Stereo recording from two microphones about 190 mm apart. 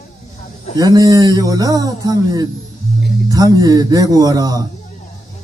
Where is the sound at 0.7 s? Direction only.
20° right (ahead or behind).